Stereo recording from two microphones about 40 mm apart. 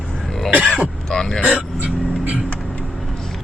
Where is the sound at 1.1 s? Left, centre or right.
Centre.